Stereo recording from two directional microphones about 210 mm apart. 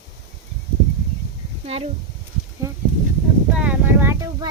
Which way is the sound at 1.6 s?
30° right (ahead or behind).